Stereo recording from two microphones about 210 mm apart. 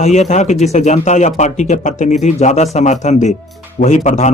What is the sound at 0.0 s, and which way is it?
Speech, 35° left (ahead or behind).